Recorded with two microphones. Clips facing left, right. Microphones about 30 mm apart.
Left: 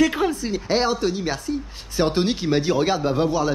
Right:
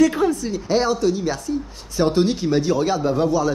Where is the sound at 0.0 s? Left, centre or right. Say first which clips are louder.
Right 3 dB; left.